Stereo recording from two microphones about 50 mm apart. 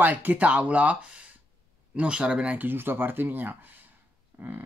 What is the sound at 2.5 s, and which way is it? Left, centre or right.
Speech, right.